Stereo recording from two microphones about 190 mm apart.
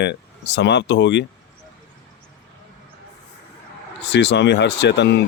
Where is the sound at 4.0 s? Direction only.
65° left (ahead or behind).